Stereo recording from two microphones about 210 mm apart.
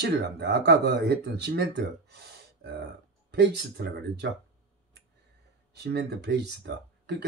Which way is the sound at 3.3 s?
55° right (ahead or behind).